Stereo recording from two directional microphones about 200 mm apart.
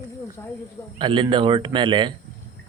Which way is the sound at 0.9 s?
25° right (ahead or behind).